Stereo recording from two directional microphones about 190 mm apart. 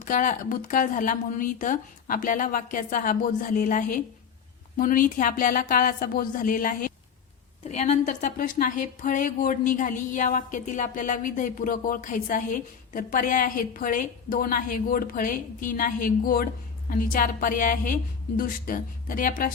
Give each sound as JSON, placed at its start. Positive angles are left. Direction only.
{"t": 0.0, "sound": "speech", "side_deg": 40}